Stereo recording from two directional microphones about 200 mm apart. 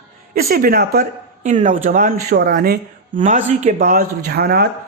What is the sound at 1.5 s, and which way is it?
Speech, 35° right (ahead or behind).